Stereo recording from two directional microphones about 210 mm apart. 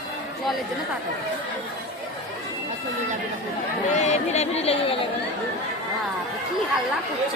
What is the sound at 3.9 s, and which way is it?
Chatter, 35° left (ahead or behind).